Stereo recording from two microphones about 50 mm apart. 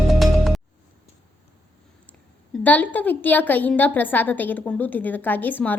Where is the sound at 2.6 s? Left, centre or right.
Left.